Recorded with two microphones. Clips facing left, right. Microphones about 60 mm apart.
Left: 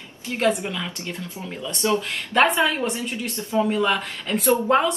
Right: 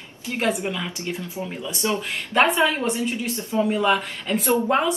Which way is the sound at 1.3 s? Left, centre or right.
Centre.